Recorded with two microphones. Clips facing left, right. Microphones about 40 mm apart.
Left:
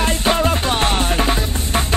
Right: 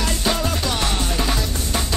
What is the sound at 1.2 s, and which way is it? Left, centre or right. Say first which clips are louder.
Music: left 4 dB; left.